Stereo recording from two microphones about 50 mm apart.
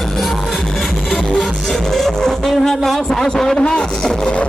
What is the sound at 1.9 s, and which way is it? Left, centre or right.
Vehicle, centre.